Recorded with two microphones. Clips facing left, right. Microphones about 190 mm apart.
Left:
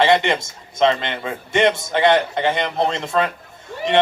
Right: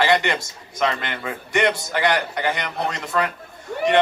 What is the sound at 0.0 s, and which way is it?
A man's voice, 25° left (ahead or behind).